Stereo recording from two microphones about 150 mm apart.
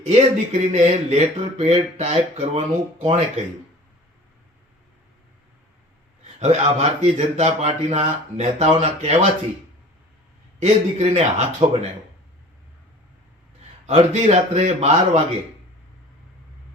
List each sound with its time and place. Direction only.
0.0 s speech: 50° right (ahead or behind)
6.4 s speech: 45° right (ahead or behind)
10.6 s speech: 45° right (ahead or behind)
13.8 s speech: 45° right (ahead or behind)